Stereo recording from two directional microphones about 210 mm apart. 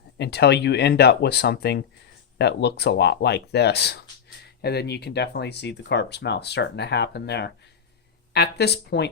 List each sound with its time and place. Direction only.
0.2 s speech: 55° left (ahead or behind)